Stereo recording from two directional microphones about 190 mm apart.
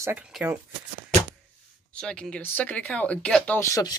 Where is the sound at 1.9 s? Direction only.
5° left (ahead or behind).